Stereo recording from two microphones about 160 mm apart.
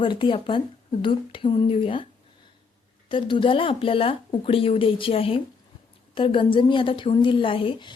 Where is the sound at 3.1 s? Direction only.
30° left (ahead or behind).